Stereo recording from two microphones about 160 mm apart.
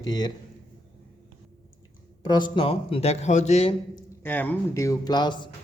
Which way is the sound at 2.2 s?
25° left (ahead or behind).